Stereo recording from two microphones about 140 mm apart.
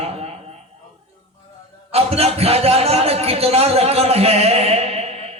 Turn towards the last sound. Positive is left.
turn(degrees=-45)  # may be behind; listen again after turning